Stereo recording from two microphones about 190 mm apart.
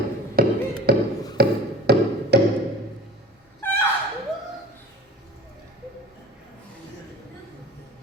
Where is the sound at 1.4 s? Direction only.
55° right (ahead or behind).